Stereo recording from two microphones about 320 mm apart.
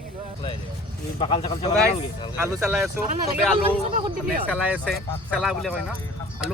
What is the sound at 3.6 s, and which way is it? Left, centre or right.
Speech, right.